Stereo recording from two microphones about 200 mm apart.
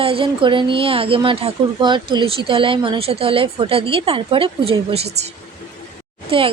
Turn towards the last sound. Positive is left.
turn(degrees=-25)  # may be behind; listen again after turning